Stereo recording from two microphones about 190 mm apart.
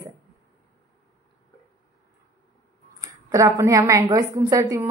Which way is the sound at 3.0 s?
20° right (ahead or behind).